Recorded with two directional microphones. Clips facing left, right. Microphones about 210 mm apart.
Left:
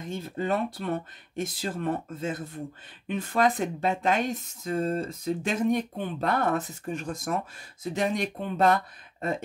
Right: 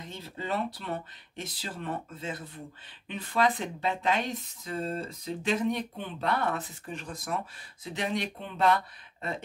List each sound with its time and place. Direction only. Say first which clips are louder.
0.0 s speech: left 8 dB; 50° left (ahead or behind)